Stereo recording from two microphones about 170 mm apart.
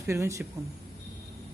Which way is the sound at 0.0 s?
15° right (ahead or behind).